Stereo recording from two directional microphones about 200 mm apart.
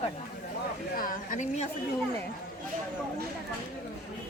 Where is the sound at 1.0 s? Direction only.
40° left (ahead or behind).